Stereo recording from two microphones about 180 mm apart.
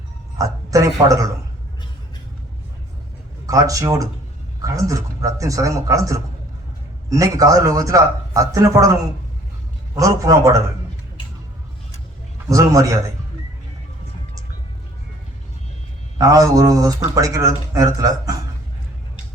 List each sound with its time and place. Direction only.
0.3 s a woman's voice: 20° right (ahead or behind)
3.4 s speech: 20° right (ahead or behind)
12.5 s speech: 20° right (ahead or behind)
16.1 s speech: 20° right (ahead or behind)